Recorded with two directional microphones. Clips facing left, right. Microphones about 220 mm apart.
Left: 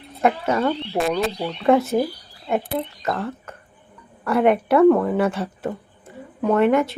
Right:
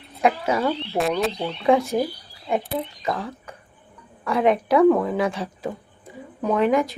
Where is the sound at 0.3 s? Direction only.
5° right (ahead or behind).